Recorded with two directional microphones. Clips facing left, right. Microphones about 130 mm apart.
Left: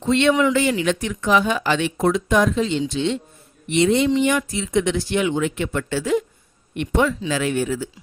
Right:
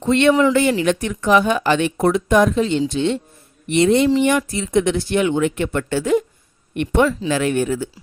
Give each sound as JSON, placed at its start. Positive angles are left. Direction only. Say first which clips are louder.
{"t": 0.0, "sound": "speech", "louder": "right 3 dB", "side_deg": -50}
{"t": 7.1, "sound": "speech", "louder": "right 3 dB", "side_deg": -40}
{"t": 7.3, "sound": "speech", "louder": "right 2 dB", "side_deg": -55}